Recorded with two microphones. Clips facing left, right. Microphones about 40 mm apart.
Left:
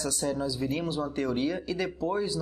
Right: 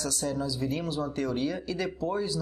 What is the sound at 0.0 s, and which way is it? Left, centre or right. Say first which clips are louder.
A man's voice: left 1 dB; centre.